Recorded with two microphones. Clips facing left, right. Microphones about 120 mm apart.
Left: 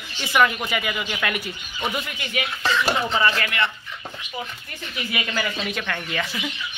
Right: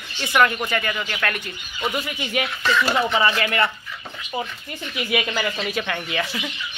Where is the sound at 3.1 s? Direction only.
15° right (ahead or behind).